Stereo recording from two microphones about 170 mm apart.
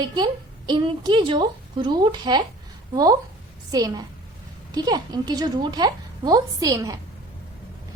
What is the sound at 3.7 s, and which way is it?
A woman's voice, 20° right (ahead or behind).